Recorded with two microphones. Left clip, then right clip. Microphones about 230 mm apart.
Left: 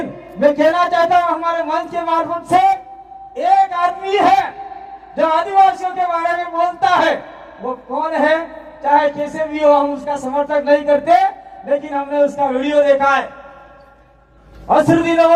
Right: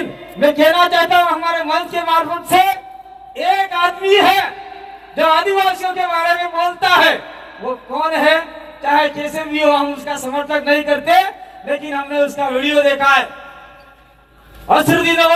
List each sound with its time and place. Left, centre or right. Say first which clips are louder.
0.0 s a man's voice: even; right
14.7 s a man's voice: even; right